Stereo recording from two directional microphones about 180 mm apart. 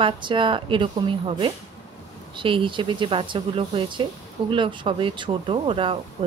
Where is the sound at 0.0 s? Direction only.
25° right (ahead or behind).